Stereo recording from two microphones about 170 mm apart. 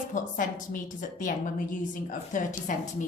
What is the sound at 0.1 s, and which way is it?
A woman's voice, 50° left (ahead or behind).